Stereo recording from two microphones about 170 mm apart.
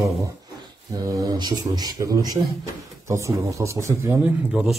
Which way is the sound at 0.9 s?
20° right (ahead or behind).